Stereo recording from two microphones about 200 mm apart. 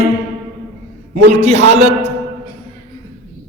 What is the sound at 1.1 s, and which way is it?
A man's voice, 35° right (ahead or behind).